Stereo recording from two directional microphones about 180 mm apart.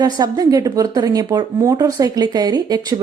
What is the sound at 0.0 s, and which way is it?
A woman's voice, 20° right (ahead or behind).